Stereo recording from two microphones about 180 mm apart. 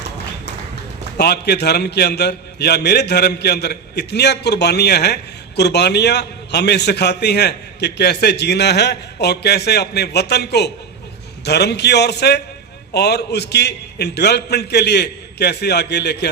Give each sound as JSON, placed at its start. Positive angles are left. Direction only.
{"t": 1.2, "sound": "a man's voice", "side_deg": 65}